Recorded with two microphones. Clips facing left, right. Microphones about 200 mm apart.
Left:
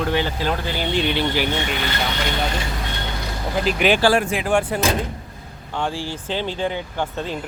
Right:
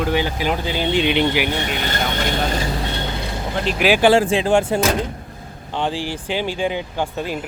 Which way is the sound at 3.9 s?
20° right (ahead or behind).